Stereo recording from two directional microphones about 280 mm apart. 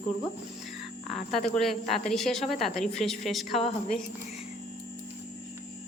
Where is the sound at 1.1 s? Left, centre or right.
Centre.